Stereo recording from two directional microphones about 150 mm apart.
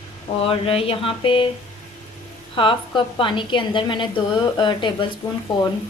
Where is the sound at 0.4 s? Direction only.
40° left (ahead or behind).